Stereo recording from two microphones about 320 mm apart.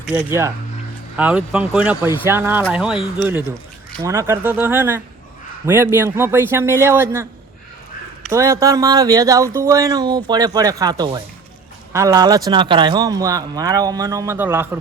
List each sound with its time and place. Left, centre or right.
0.0 s speech: centre
8.3 s speech: centre